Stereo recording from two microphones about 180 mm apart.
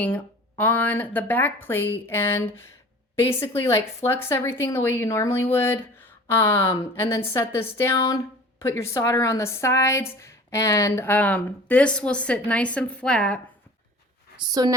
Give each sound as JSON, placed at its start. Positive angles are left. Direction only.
{"t": 0.0, "sound": "a woman's voice", "side_deg": 10}
{"t": 14.6, "sound": "speech", "side_deg": -20}